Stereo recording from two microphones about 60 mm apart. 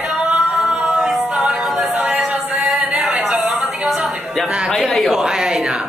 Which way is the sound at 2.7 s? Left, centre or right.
Centre.